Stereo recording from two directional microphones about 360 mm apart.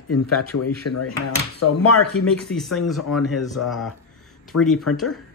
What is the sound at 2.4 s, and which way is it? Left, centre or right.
Speech, centre.